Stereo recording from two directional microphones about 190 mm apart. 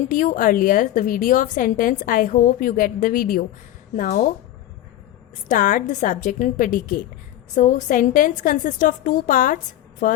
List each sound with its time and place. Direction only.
0.1 s a woman's voice: 45° left (ahead or behind)
5.5 s a woman's voice: 45° left (ahead or behind)